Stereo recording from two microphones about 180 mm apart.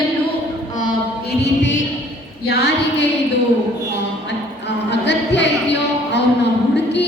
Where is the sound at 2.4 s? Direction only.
65° left (ahead or behind).